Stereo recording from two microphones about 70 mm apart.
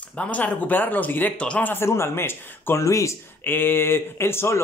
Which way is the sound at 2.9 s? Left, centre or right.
Left.